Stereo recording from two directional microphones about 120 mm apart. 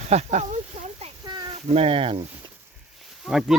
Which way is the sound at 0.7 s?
80° right.